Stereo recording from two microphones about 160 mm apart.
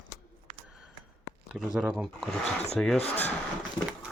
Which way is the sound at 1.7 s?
5° right (ahead or behind).